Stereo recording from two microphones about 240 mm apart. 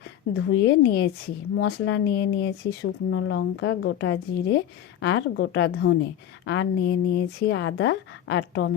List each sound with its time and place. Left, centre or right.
0.3 s speech: left